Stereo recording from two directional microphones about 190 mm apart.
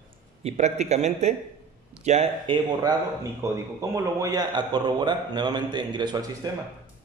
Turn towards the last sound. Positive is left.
turn(degrees=-20)  # may be behind; listen again after turning